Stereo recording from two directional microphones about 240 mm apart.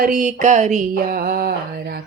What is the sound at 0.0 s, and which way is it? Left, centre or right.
Music, right.